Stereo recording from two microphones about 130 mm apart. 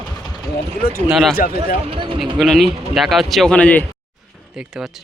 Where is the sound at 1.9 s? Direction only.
40° right (ahead or behind).